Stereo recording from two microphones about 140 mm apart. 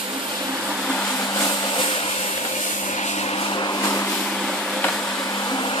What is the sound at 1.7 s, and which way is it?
Vehicle, 40° left (ahead or behind).